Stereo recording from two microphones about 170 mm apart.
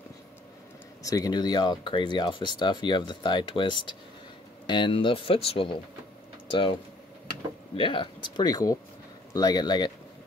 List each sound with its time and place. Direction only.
1.0 s speech: 20° left (ahead or behind)